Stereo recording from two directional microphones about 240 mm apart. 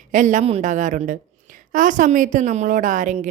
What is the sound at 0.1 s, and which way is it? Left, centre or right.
A woman's voice, right.